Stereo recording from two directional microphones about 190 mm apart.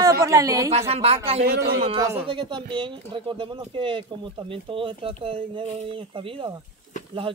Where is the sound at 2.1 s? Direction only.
25° right (ahead or behind).